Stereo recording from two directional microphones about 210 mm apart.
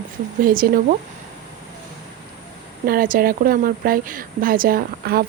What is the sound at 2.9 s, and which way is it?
Speech, 45° right (ahead or behind).